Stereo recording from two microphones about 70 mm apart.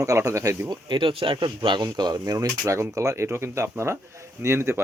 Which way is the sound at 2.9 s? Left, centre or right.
Right.